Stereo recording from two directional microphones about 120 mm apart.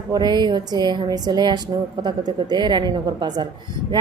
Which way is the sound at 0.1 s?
35° right (ahead or behind).